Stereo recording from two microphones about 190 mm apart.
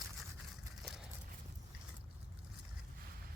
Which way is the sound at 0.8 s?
Centre (ahead or behind).